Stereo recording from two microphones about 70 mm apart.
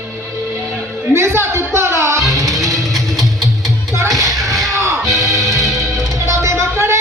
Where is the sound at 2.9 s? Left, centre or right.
Right.